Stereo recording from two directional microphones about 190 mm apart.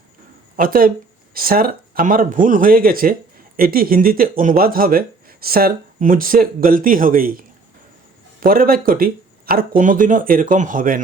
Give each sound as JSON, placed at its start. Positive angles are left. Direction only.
{"t": 0.5, "sound": "speech", "side_deg": -50}